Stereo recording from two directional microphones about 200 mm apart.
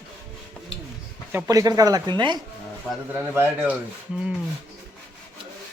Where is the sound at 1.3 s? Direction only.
15° right (ahead or behind).